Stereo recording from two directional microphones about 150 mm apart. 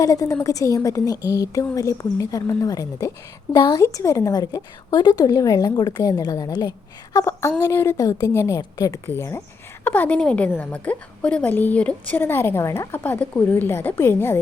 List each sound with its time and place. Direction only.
0.0 s a woman's voice: 20° left (ahead or behind)